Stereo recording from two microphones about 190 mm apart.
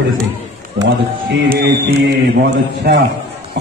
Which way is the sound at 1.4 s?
65° right (ahead or behind).